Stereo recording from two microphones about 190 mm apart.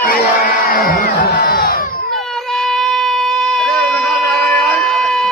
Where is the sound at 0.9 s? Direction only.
50° left (ahead or behind).